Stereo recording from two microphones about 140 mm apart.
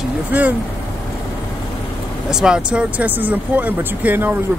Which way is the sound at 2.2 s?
5° right (ahead or behind).